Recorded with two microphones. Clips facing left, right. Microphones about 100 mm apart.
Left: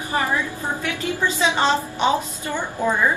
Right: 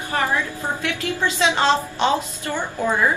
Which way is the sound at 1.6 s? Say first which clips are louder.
Right 1 dB; 15° left (ahead or behind).